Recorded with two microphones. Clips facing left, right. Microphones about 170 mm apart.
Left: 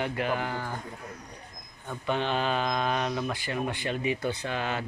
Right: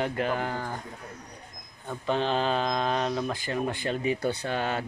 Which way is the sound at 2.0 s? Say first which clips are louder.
Right 2 dB; 35° right (ahead or behind).